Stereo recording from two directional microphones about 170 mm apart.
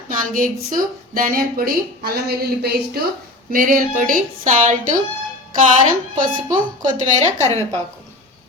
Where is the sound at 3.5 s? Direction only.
55° right (ahead or behind).